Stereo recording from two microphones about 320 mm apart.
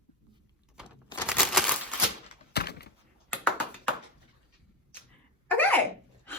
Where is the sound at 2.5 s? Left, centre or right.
Left.